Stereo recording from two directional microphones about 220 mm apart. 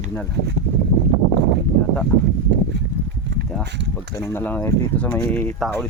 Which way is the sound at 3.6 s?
50° right (ahead or behind).